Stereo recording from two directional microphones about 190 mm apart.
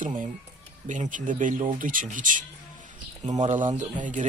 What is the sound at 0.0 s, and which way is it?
Speech, 45° right (ahead or behind).